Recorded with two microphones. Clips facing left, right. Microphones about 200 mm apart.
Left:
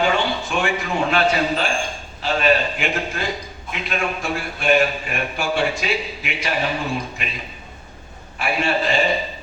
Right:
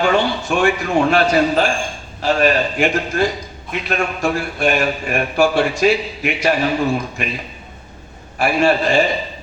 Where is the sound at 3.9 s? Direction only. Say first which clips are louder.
Right 5 dB; 50° right (ahead or behind).